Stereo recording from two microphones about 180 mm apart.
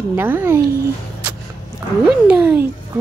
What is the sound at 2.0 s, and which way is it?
Speech, 5° right (ahead or behind).